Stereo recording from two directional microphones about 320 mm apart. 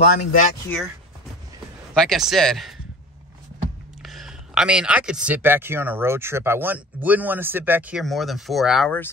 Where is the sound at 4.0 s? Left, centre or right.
Centre.